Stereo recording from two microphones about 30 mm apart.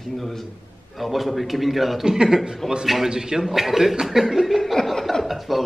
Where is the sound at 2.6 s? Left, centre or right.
Centre.